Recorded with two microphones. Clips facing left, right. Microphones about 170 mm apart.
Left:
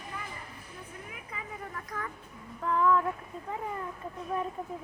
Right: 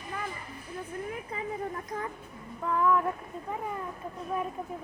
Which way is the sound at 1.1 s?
30° right (ahead or behind).